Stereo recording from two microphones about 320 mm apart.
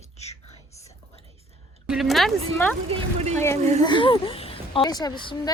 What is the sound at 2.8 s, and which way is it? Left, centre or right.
Speech, centre.